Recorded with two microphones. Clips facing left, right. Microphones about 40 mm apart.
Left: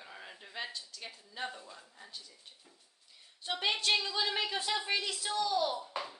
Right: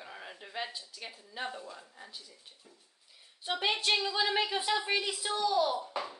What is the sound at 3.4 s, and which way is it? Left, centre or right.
A woman's voice, centre.